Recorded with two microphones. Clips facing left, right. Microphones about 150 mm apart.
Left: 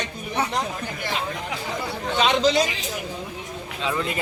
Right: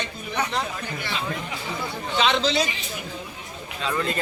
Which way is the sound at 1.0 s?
45° left (ahead or behind).